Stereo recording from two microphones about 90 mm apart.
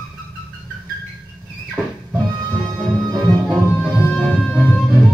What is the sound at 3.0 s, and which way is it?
Music, 45° right (ahead or behind).